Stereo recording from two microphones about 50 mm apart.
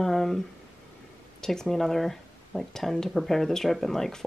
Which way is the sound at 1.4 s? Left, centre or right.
Centre.